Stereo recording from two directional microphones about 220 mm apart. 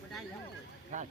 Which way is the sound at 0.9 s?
30° right (ahead or behind).